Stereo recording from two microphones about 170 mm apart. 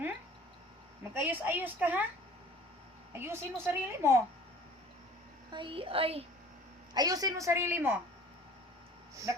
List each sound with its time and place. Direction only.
1.1 s a woman's voice: 10° right (ahead or behind)
3.2 s a woman's voice: 15° right (ahead or behind)
5.5 s a woman's voice: 30° right (ahead or behind)
6.9 s a woman's voice: 20° right (ahead or behind)